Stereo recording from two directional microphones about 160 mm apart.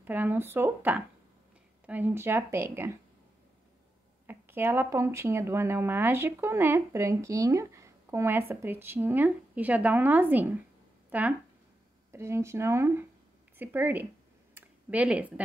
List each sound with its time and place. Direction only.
0.0 s speech: 10° right (ahead or behind)
4.3 s speech: 15° right (ahead or behind)
14.5 s a sound: 10° right (ahead or behind)